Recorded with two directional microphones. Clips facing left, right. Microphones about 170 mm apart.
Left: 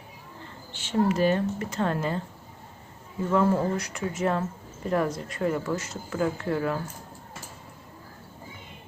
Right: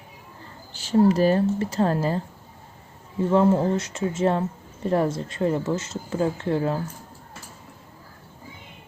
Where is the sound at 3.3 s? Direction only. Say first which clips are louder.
Right 4 dB; 25° right (ahead or behind).